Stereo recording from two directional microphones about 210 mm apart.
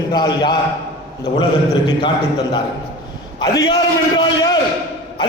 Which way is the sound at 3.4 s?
20° left (ahead or behind).